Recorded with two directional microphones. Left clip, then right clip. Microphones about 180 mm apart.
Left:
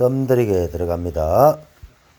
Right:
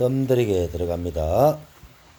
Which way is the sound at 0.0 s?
10° left (ahead or behind).